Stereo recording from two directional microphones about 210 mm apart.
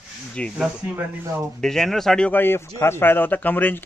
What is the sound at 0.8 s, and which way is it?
Speech, 10° right (ahead or behind).